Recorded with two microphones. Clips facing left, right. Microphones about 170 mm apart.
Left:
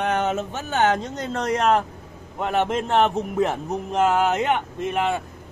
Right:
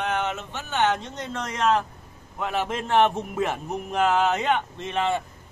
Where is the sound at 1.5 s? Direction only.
50° left (ahead or behind).